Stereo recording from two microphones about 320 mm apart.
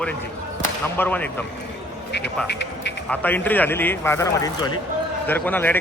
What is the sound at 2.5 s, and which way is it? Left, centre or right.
Speech, left.